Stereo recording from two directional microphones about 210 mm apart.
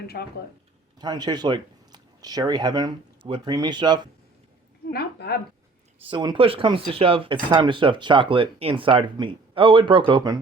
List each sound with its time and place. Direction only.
0.9 s speech: 20° right (ahead or behind)
4.9 s a sound: 50° left (ahead or behind)
6.1 s speech: 25° right (ahead or behind)